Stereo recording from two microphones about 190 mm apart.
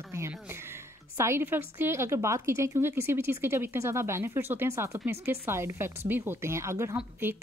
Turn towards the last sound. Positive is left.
turn(degrees=-10)  # may be behind; listen again after turning